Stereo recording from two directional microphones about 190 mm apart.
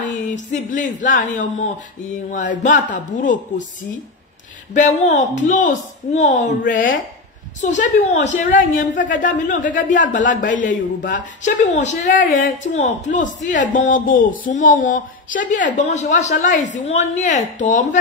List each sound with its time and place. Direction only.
0.3 s speech: 40° left (ahead or behind)
7.6 s speech: 40° left (ahead or behind)